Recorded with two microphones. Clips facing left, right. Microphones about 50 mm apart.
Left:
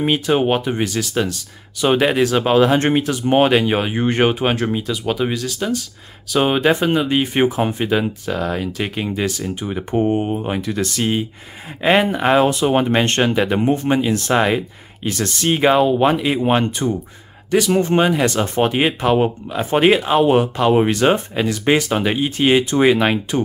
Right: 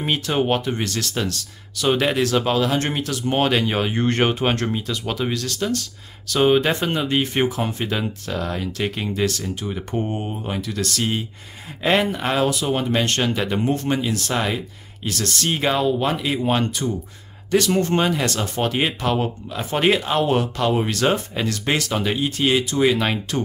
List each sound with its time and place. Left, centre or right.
0.0 s speech: centre; by 13.3 s left
13.3 s speech: left
15.0 s speech: left
17.5 s speech: centre
20.7 s speech: left
21.0 s speech: centre